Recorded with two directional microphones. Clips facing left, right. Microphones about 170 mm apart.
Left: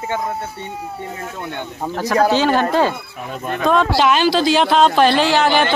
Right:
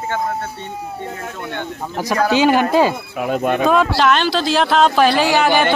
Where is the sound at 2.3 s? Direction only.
10° right (ahead or behind).